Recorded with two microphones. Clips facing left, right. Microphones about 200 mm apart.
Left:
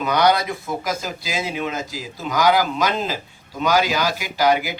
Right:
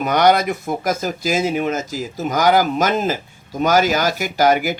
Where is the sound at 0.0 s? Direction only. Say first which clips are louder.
Right 3 dB; 50° right (ahead or behind).